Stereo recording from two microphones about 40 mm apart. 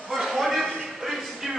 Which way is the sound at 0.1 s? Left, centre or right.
Centre.